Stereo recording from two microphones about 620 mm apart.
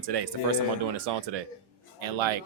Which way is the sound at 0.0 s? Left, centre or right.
Right.